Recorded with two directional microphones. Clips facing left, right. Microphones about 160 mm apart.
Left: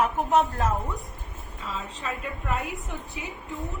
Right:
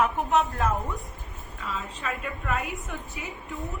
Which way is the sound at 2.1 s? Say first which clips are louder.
Even; 20° left (ahead or behind).